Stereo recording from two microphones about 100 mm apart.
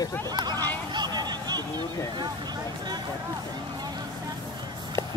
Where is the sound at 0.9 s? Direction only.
45° right (ahead or behind).